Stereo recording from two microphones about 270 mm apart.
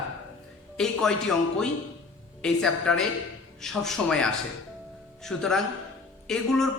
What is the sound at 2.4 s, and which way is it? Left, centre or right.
Speech, centre.